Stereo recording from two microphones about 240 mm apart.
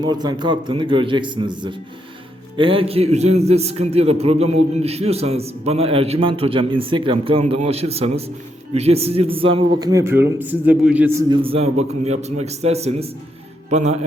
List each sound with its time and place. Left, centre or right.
0.0 s a man's voice: centre